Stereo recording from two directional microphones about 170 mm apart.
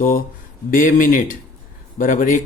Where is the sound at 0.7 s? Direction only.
50° left (ahead or behind).